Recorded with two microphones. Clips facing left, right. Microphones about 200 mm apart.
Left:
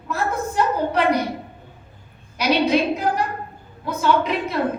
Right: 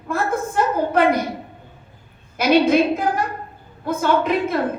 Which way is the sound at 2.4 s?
50° right (ahead or behind).